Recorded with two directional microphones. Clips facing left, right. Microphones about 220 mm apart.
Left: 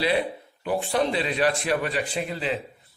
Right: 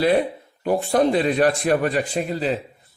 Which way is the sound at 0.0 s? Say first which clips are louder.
Right 6 dB; 45° right (ahead or behind).